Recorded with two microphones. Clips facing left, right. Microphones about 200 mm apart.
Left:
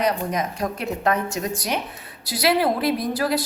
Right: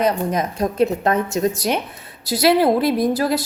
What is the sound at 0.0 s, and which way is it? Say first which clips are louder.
A woman's voice: right 4 dB; 25° right (ahead or behind).